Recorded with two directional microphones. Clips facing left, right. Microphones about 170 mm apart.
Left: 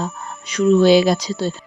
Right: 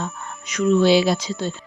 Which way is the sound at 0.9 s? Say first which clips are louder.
Left 4 dB; 45° left (ahead or behind).